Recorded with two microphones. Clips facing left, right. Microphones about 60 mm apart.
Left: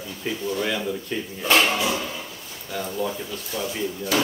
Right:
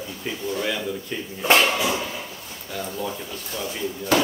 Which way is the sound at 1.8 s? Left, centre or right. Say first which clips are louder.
Right 1 dB; centre.